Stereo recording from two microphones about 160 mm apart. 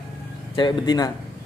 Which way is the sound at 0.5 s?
25° left (ahead or behind).